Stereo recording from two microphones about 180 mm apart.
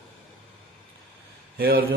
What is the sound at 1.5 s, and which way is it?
Speech, 55° right (ahead or behind).